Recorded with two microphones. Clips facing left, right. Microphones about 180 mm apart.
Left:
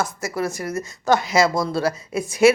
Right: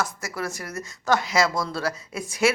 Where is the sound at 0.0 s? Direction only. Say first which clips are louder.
Left 5 dB; 25° left (ahead or behind).